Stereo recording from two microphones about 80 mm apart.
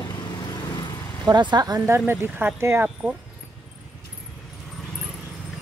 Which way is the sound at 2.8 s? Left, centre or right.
Centre.